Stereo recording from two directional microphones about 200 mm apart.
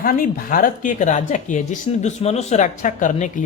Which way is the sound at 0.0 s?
45° left (ahead or behind).